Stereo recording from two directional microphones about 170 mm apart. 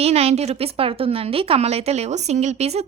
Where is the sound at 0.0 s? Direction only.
35° right (ahead or behind).